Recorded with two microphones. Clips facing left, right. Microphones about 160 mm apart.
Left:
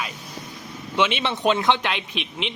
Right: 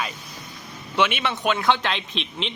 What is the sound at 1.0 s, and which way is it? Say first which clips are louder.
Speech: left 1 dB; 25° left (ahead or behind).